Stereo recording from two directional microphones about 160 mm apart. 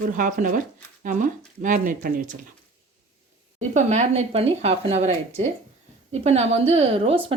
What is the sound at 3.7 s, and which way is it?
A woman's voice, 45° right (ahead or behind).